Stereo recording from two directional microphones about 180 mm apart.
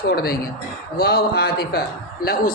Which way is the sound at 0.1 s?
55° left (ahead or behind).